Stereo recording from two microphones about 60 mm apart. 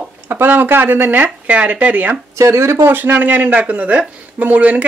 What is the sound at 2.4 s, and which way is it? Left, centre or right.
Speech, right.